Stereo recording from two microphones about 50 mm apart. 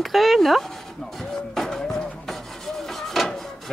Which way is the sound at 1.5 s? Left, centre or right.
Centre.